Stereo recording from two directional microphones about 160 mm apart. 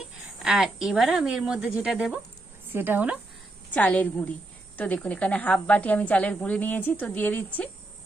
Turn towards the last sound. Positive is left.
turn(degrees=10)  # may be behind; listen again after turning